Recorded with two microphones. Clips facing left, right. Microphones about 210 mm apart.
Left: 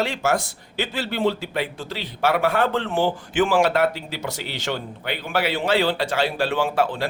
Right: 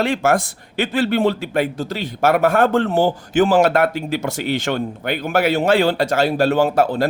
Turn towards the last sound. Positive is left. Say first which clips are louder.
# right 6 dB
turn(degrees=-45)  # may be behind; listen again after turning